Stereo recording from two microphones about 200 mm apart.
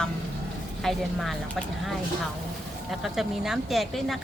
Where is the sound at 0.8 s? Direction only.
Centre (ahead or behind).